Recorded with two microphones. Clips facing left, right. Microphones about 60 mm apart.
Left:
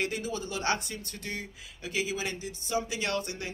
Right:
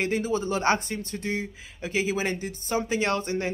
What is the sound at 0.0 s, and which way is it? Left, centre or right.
Speech, right.